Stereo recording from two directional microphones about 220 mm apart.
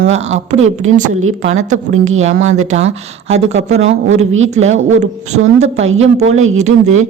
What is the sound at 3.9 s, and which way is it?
Speech, 65° right (ahead or behind).